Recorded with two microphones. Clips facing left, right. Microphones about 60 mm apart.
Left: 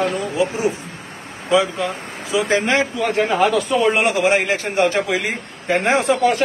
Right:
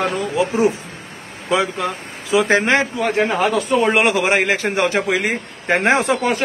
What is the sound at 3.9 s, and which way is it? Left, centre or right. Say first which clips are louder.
Speech: right 1 dB; right.